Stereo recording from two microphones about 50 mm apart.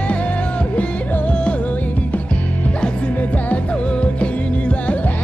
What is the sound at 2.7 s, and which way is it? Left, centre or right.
Music, centre.